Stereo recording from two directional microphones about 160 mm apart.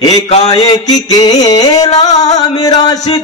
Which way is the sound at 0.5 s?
25° left (ahead or behind).